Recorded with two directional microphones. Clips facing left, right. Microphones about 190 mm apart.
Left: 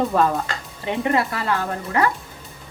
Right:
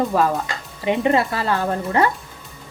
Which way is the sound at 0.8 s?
20° right (ahead or behind).